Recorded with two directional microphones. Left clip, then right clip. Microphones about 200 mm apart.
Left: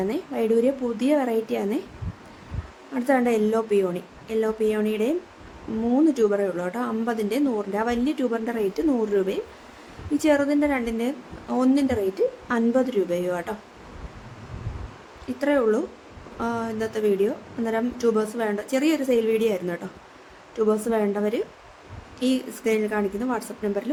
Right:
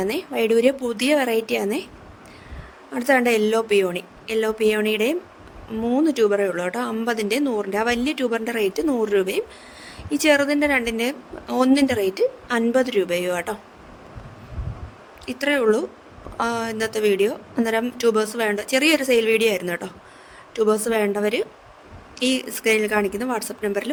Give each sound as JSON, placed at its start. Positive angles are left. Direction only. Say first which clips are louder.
{"t": 0.0, "sound": "speech", "louder": "right 3 dB", "side_deg": -45}
{"t": 2.9, "sound": "speech", "louder": "right 3 dB", "side_deg": -45}
{"t": 15.3, "sound": "speech", "louder": "right 2 dB", "side_deg": -45}